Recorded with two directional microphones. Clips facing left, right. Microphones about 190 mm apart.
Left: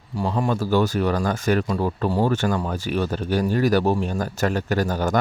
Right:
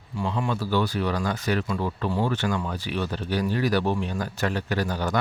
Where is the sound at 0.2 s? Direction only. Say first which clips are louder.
Left 4 dB; 45° left (ahead or behind).